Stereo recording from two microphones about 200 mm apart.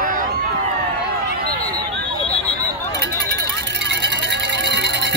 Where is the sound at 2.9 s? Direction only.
60° right (ahead or behind).